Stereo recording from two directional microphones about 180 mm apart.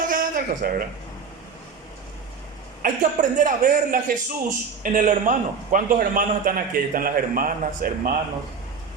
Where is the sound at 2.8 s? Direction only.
45° right (ahead or behind).